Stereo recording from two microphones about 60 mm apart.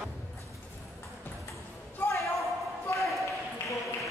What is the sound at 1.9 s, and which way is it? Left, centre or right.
Basketball bounce, left.